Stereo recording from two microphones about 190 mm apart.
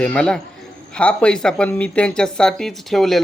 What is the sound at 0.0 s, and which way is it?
Speech, 5° left (ahead or behind).